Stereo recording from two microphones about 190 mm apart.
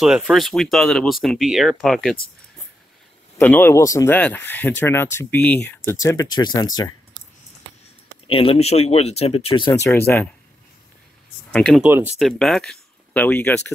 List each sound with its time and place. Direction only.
0.0 s speech: centre (ahead or behind)
3.3 s speech: 10° left (ahead or behind)
8.3 s speech: 30° left (ahead or behind)
9.7 s speech: 15° left (ahead or behind)
11.5 s speech: 5° left (ahead or behind)